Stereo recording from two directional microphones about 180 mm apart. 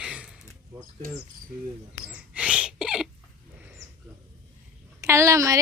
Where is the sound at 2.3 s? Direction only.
5° right (ahead or behind).